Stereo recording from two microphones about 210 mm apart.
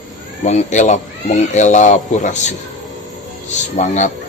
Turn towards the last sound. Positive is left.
turn(degrees=35)  # may be behind; listen again after turning